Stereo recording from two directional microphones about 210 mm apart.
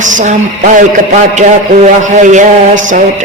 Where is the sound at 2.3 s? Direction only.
35° right (ahead or behind).